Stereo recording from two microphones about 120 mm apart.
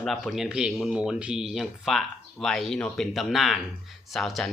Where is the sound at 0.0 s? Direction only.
Centre (ahead or behind).